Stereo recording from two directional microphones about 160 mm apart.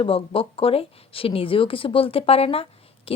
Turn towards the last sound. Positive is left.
turn(degrees=35)  # may be behind; listen again after turning